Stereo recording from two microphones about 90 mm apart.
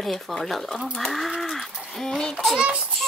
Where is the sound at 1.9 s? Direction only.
5° left (ahead or behind).